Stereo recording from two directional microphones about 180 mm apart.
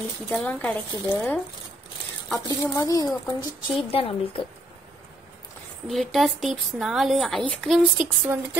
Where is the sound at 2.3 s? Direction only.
20° left (ahead or behind).